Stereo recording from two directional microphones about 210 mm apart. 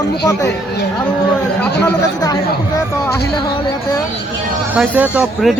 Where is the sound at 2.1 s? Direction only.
15° left (ahead or behind).